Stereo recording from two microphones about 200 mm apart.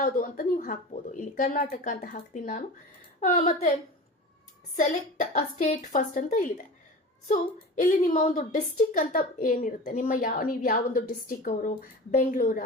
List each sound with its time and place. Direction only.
0.0 s speech: 45° left (ahead or behind)
4.8 s a woman's voice: 40° left (ahead or behind)